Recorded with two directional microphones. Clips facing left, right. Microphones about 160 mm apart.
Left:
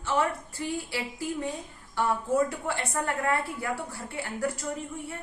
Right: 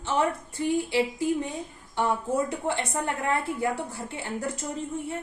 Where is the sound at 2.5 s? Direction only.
20° right (ahead or behind).